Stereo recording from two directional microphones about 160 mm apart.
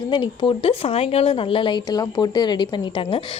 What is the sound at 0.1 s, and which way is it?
Speech, 30° left (ahead or behind).